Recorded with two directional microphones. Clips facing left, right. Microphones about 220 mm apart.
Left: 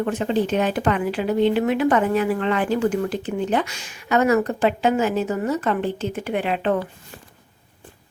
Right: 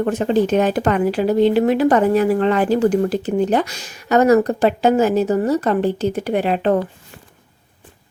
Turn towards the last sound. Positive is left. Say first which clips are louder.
# right 5 dB
turn(degrees=-40)  # may be behind; listen again after turning